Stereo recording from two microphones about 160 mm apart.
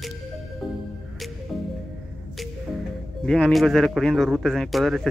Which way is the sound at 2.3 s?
Centre (ahead or behind).